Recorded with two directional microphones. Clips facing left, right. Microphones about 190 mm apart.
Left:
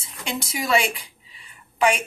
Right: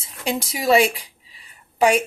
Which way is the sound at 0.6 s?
35° right (ahead or behind).